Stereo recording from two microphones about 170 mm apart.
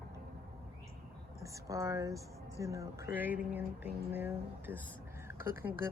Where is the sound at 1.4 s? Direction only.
20° right (ahead or behind).